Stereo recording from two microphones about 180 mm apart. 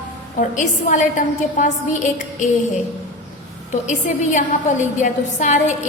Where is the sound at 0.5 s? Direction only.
40° left (ahead or behind).